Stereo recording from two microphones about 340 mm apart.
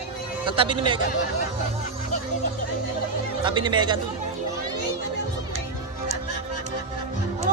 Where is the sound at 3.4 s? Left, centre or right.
Centre.